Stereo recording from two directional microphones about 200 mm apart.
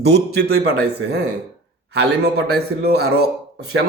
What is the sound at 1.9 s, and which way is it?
Speech, 55° right (ahead or behind).